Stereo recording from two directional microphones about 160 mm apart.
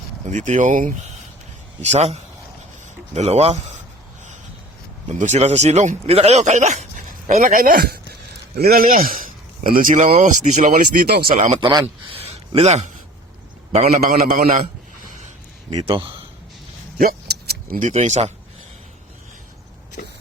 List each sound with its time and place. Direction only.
0.3 s speech: 50° right (ahead or behind)
1.8 s speech: 45° right (ahead or behind)
3.2 s speech: 40° right (ahead or behind)
5.0 s a man's voice: 50° right (ahead or behind)
11.0 s speech: 75° right (ahead or behind)
11.3 s speech: 50° right (ahead or behind)
11.6 s a man's voice: 30° right (ahead or behind)
12.5 s a man's voice: 40° right (ahead or behind)
15.8 s a man's voice: 30° right (ahead or behind)
17.0 s speech: 70° right (ahead or behind); by 18.3 s 50° right (ahead or behind)